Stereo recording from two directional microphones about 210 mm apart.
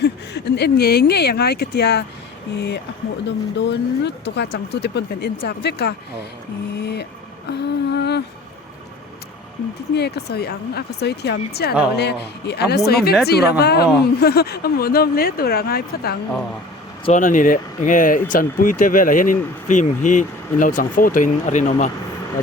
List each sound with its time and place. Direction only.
0.0 s speech: 55° left (ahead or behind)
7.5 s a sound: 55° left (ahead or behind)
9.9 s speech: 50° left (ahead or behind); by 21.8 s 35° left (ahead or behind)